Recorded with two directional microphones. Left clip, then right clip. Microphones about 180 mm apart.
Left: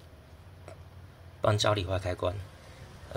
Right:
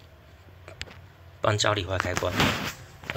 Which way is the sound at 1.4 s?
5° left (ahead or behind).